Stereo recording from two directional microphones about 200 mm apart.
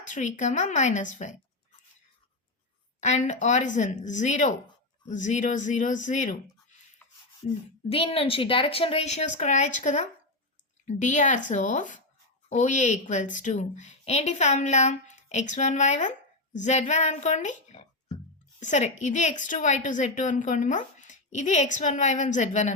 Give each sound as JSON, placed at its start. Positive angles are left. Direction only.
{"t": 0.0, "sound": "a woman's voice", "side_deg": 40}
{"t": 3.0, "sound": "a woman's voice", "side_deg": 35}
{"t": 7.9, "sound": "a woman's voice", "side_deg": 30}